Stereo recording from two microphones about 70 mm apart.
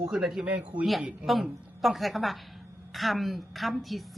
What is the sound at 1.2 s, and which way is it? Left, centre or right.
A woman's voice, centre.